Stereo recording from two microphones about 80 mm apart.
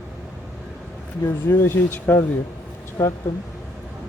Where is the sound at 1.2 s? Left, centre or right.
Left.